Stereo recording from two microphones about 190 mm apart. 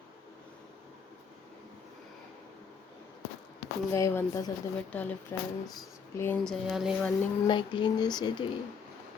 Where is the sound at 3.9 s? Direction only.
15° left (ahead or behind).